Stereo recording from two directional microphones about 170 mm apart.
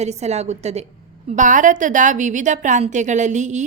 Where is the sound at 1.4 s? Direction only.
50° right (ahead or behind).